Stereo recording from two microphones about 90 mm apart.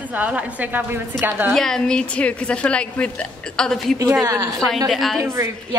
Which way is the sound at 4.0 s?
35° right (ahead or behind).